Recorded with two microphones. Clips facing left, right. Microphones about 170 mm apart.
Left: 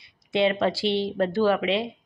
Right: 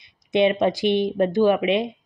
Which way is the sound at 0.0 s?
20° right (ahead or behind).